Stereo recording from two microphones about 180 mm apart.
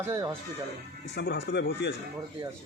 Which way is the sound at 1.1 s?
70° left (ahead or behind).